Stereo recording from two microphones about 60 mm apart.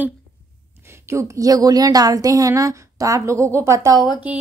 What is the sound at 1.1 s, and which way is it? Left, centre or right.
A woman's voice, right.